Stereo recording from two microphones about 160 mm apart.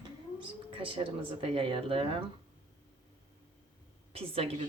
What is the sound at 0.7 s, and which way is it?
Speech, 35° right (ahead or behind).